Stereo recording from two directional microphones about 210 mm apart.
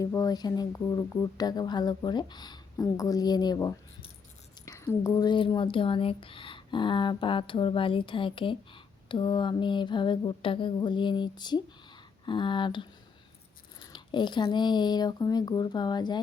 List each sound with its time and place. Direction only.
0.0 s speech: 15° left (ahead or behind)